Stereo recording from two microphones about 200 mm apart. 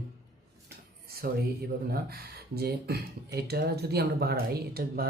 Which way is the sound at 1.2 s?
50° right (ahead or behind).